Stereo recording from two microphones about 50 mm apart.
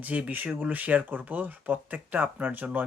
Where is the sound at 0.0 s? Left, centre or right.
Right.